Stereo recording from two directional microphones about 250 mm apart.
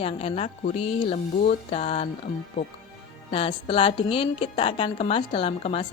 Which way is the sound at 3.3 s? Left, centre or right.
Left.